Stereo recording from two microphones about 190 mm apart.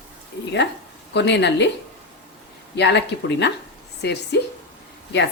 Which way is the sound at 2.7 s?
65° left (ahead or behind).